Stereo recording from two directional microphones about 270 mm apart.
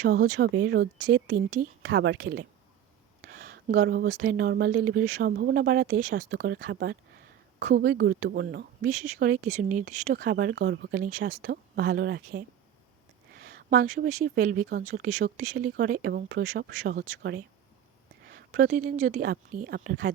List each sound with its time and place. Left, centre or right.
0.1 s speech: right